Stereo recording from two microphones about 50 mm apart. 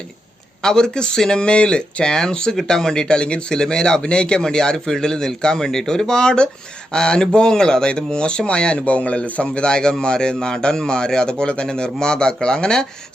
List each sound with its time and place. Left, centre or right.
0.6 s speech: centre